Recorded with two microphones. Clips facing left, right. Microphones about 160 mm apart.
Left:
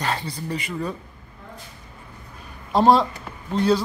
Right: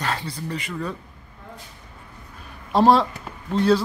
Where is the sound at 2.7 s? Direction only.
Centre (ahead or behind).